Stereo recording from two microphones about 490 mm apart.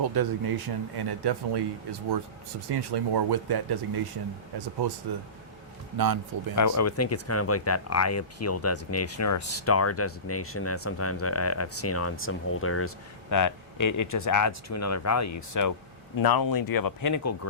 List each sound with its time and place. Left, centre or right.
0.0 s speech: right
6.6 s speech: left
13.3 s speech: left